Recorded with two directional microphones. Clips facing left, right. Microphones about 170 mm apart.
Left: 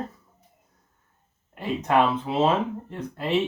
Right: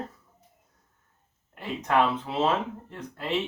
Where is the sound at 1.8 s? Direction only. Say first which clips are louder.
Left 2 dB; 15° left (ahead or behind).